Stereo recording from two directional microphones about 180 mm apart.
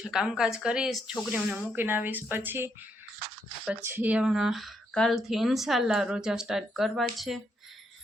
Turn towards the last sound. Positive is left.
turn(degrees=0)  # may be behind; listen again after turning